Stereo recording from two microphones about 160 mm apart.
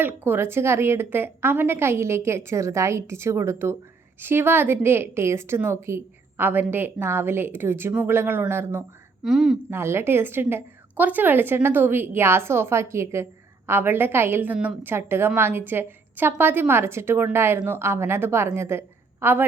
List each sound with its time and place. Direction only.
0.0 s a woman's voice: 15° right (ahead or behind)
9.2 s a woman's voice: centre (ahead or behind)
9.6 s a woman's voice: 15° right (ahead or behind)